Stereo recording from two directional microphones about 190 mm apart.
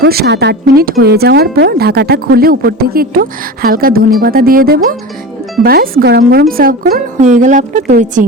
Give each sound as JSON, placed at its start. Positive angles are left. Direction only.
{"t": 0.0, "sound": "speech", "side_deg": -55}
{"t": 7.9, "sound": "speech", "side_deg": -55}